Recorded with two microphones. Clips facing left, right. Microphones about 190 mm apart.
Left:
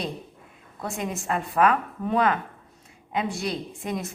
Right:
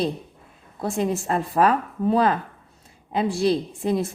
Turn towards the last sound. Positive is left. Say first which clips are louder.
# right 7 dB
turn(degrees=-30)  # may be behind; listen again after turning